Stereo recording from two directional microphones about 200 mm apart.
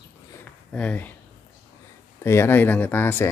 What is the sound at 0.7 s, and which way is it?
Speech, 5° left (ahead or behind).